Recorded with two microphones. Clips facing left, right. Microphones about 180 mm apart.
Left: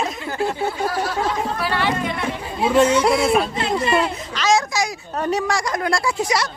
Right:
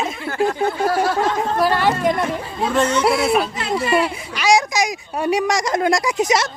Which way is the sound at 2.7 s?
10° left (ahead or behind).